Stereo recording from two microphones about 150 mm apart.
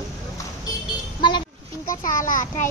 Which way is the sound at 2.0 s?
60° left (ahead or behind).